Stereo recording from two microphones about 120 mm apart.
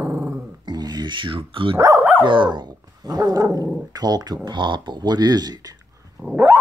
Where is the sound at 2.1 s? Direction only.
45° right (ahead or behind).